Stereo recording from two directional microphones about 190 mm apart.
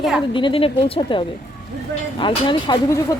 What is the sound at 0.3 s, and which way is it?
Speech, 25° left (ahead or behind).